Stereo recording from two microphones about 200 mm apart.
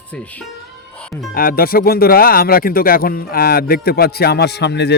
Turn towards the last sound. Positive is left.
turn(degrees=55)  # may be behind; listen again after turning